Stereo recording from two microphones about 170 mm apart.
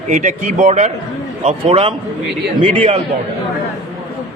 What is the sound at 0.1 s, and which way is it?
A man's voice, 45° right (ahead or behind).